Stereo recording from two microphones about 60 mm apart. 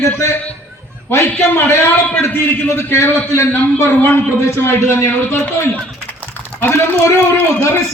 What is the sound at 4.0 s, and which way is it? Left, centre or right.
A man's voice, left.